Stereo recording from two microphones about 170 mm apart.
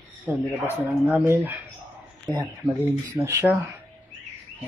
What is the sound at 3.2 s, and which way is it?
Speech, 15° right (ahead or behind).